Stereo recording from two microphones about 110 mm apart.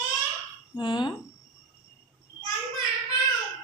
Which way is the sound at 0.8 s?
45° left (ahead or behind).